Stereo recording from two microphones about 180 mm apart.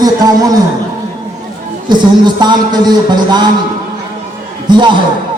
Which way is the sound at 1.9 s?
25° right (ahead or behind).